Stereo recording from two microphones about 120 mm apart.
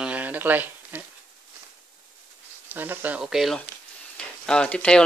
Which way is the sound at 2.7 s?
15° right (ahead or behind).